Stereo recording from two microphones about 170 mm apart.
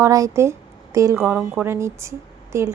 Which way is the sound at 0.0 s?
20° right (ahead or behind).